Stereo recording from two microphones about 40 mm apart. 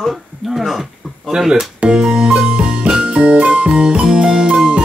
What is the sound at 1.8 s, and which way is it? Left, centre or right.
Music, right.